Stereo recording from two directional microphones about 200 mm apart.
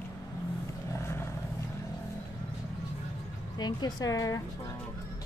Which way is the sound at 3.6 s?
20° left (ahead or behind).